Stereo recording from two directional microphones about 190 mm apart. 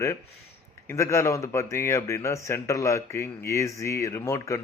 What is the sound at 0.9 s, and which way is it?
A man's voice, 15° left (ahead or behind).